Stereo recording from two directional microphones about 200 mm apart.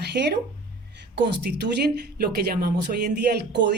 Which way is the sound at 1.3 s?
55° right (ahead or behind).